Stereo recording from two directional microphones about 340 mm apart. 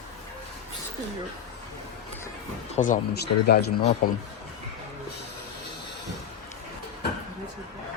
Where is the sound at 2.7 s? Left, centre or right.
Left.